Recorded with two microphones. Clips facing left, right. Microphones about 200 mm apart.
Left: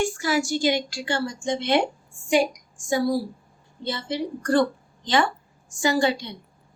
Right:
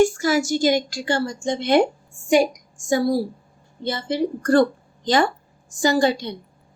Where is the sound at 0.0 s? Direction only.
45° right (ahead or behind).